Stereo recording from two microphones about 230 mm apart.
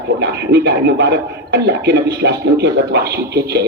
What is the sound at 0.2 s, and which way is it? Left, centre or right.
Speech, right.